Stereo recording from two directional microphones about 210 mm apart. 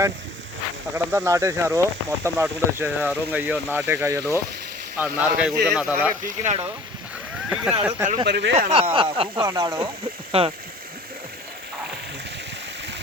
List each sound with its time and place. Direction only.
0.9 s speech: 15° right (ahead or behind)
6.2 s speech: 35° right (ahead or behind)
7.5 s speech: 5° right (ahead or behind)
8.3 s speech: 55° right (ahead or behind)
8.5 s speech: 30° right (ahead or behind)
9.3 s speech: 15° right (ahead or behind)
10.3 s speech: 25° right (ahead or behind)